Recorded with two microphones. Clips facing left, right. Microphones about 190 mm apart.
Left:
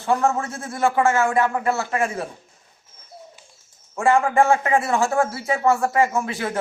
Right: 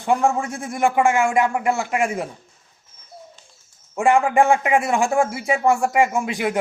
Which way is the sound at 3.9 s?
15° right (ahead or behind).